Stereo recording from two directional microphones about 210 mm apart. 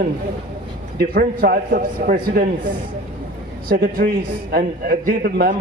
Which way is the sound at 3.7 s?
45° right (ahead or behind).